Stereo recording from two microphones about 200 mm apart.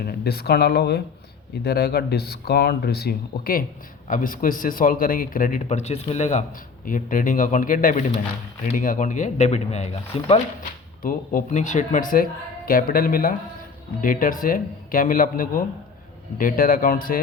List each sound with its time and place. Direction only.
0.0 s speech: 50° left (ahead or behind); by 10.4 s 35° left (ahead or behind)
11.0 s speech: 45° left (ahead or behind)